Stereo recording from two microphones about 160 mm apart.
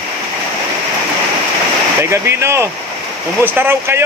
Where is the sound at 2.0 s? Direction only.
15° right (ahead or behind).